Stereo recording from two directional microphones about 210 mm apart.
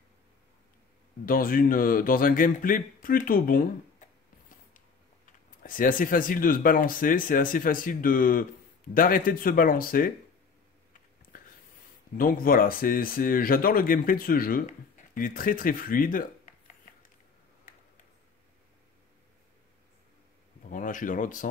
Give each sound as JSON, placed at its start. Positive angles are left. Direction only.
{"t": 1.2, "sound": "a man's voice", "side_deg": 45}
{"t": 4.0, "sound": "a sound", "side_deg": 35}
{"t": 5.6, "sound": "a man's voice", "side_deg": 40}
{"t": 11.3, "sound": "a sound", "side_deg": 40}
{"t": 12.2, "sound": "speech", "side_deg": 40}
{"t": 20.7, "sound": "speech", "side_deg": 40}